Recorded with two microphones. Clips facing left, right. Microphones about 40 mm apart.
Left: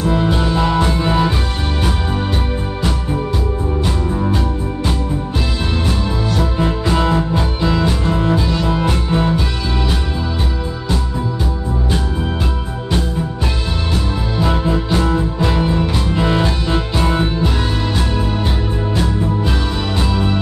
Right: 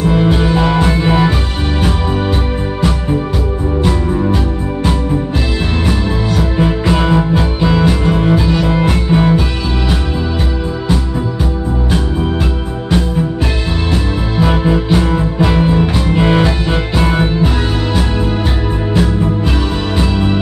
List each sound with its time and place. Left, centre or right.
0.0 s music: right
3.8 s music: centre
5.9 s music: right
14.3 s music: right
20.0 s music: centre